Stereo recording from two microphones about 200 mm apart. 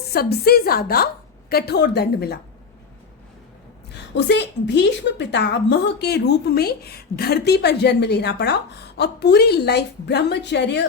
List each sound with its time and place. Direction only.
0.1 s a woman's voice: 50° left (ahead or behind)
3.8 s a woman's voice: 60° left (ahead or behind)